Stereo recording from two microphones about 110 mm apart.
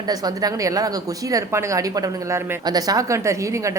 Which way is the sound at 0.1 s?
35° right (ahead or behind).